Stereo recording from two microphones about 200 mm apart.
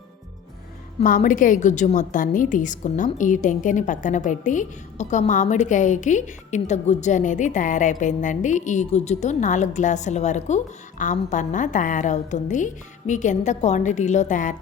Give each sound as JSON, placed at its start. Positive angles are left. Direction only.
{"t": 0.9, "sound": "a woman's voice", "side_deg": 40}